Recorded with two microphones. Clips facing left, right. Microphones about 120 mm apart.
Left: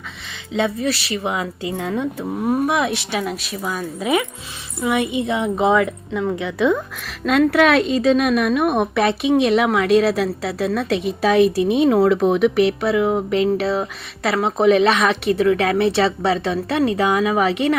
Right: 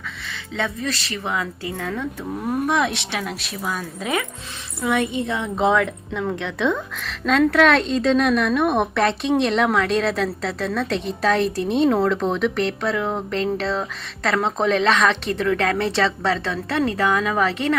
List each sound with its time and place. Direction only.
0.5 s a woman's voice: 15° left (ahead or behind)
2.5 s a woman's voice: 10° left (ahead or behind)
5.5 s a woman's voice: 5° left (ahead or behind)